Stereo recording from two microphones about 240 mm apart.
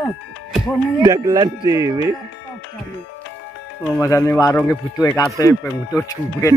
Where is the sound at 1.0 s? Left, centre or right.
Centre.